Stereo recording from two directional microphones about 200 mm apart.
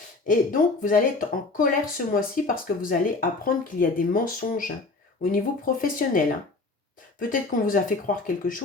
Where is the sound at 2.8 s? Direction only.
45° left (ahead or behind).